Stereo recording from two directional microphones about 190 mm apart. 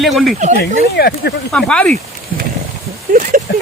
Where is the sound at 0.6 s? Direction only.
55° left (ahead or behind).